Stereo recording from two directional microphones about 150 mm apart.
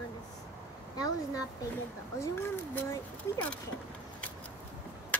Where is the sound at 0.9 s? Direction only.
25° left (ahead or behind).